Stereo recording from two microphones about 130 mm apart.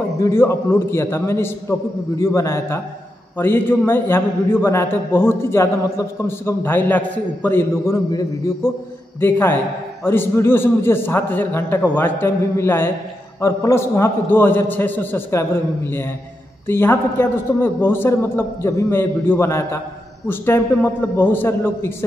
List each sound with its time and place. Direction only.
0.2 s a man's voice: 20° left (ahead or behind)